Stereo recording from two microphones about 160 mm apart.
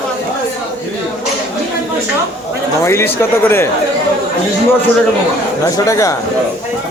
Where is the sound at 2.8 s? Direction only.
15° left (ahead or behind).